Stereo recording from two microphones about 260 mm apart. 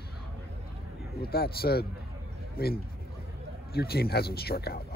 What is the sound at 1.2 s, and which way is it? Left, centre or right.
Speech, left.